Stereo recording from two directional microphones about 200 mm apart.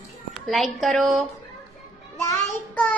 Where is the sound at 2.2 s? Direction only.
15° left (ahead or behind).